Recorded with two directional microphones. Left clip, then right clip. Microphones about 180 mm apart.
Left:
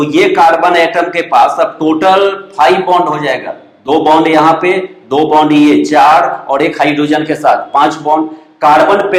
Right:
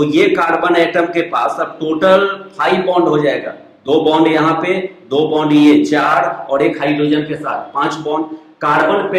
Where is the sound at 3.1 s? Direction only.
35° left (ahead or behind).